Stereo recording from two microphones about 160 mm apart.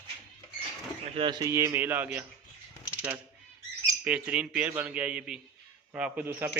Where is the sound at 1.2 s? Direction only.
25° right (ahead or behind); by 2.2 s 10° right (ahead or behind).